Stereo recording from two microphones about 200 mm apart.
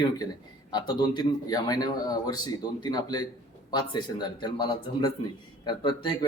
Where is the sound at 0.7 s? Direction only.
20° left (ahead or behind).